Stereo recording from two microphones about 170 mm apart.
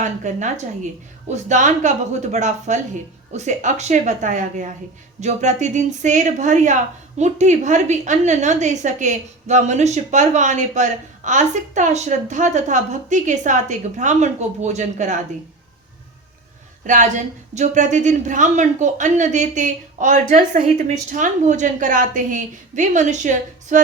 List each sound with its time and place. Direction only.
0.0 s a woman's voice: 45° right (ahead or behind)
16.8 s a woman's voice: 45° right (ahead or behind)